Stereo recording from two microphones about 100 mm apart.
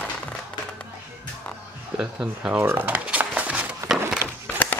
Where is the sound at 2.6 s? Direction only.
20° right (ahead or behind).